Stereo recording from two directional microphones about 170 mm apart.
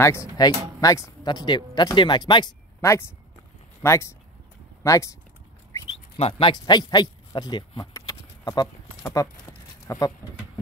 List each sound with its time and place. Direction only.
0.0 s speech: 15° left (ahead or behind)
2.8 s speech: 15° left (ahead or behind)
6.1 s speech: 35° left (ahead or behind)
6.5 s speech: 25° left (ahead or behind)
7.9 s a sound: 20° left (ahead or behind)